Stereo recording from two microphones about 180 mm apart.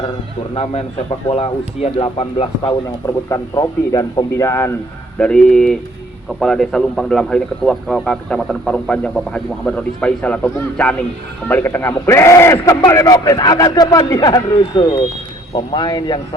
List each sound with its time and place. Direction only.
0.5 s speech: 35° left (ahead or behind)
3.2 s a man's voice: 20° left (ahead or behind)
5.2 s a man's voice: 5° left (ahead or behind); by 16.2 s 25° left (ahead or behind)